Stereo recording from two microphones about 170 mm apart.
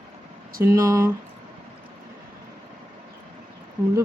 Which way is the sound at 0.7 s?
20° right (ahead or behind).